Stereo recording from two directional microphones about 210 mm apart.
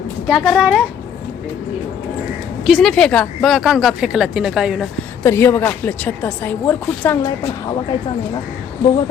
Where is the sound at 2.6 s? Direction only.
Centre (ahead or behind).